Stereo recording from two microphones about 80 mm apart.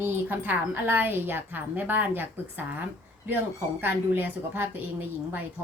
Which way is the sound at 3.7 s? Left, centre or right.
Right.